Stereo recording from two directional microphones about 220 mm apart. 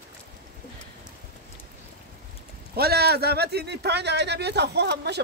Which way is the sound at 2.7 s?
45° right (ahead or behind).